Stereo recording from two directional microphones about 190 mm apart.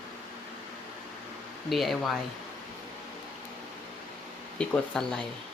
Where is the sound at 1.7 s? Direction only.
Centre (ahead or behind).